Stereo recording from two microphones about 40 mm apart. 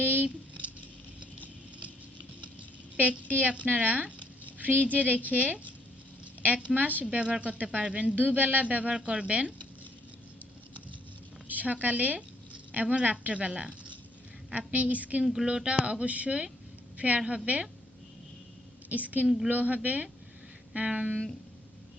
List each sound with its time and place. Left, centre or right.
0.0 s a sound: right
3.0 s a woman's voice: right
6.7 s speech: right
7.0 s a woman's voice: right
11.4 s a woman's voice: right
15.2 s a woman's voice: centre; by 17.7 s right
18.9 s a woman's voice: right
20.7 s speech: right